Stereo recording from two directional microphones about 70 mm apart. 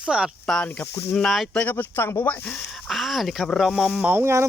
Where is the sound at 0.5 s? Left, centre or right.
Centre.